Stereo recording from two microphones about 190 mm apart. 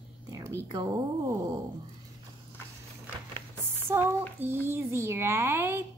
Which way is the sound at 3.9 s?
15° right (ahead or behind).